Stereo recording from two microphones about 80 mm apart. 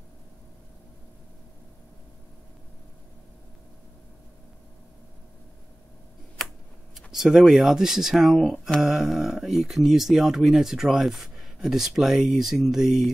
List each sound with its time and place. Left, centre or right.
7.0 s speech: centre
8.8 s speech: centre